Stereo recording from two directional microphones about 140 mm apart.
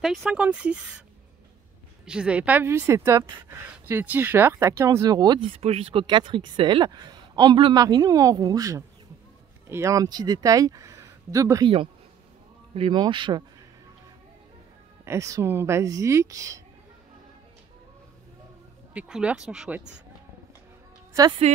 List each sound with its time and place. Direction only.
0.0 s speech: centre (ahead or behind)
2.0 s a woman's voice: 5° right (ahead or behind); by 5.5 s 30° right (ahead or behind)
5.5 s speech: 45° right (ahead or behind); by 11.6 s 25° right (ahead or behind)
11.6 s speech: 40° right (ahead or behind)
15.0 s a woman's voice: 20° right (ahead or behind)
18.9 s speech: 5° right (ahead or behind)
21.1 s speech: 25° right (ahead or behind)